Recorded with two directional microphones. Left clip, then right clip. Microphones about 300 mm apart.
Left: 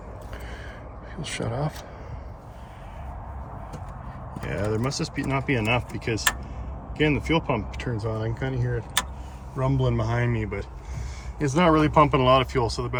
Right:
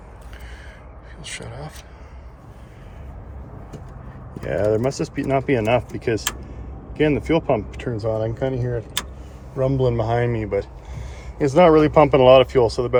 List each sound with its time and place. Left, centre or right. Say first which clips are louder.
1.4 s speech: left 6 dB; left
4.4 s speech: right 8 dB; centre